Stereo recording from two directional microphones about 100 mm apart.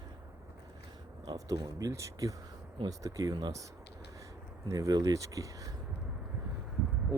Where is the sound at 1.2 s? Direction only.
45° right (ahead or behind).